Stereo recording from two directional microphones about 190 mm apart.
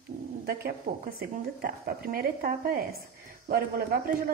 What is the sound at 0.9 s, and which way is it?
A woman's voice, 50° right (ahead or behind).